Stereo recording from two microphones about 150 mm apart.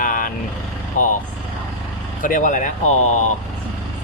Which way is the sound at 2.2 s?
65° left (ahead or behind).